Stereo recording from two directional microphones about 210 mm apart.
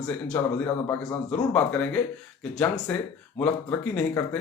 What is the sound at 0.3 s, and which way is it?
A man's voice, 10° left (ahead or behind).